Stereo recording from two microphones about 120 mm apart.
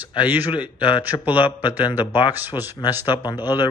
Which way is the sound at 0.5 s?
40° left (ahead or behind).